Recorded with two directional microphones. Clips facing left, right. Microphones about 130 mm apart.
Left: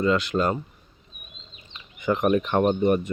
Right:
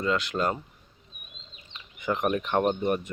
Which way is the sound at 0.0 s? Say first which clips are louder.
Left 4 dB; centre (ahead or behind).